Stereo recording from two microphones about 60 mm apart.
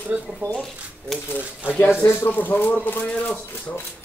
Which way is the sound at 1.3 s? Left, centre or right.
Left.